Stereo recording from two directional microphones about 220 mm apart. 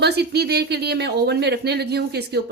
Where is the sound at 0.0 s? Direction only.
50° right (ahead or behind).